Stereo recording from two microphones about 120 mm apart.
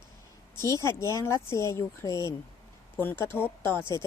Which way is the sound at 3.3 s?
20° left (ahead or behind).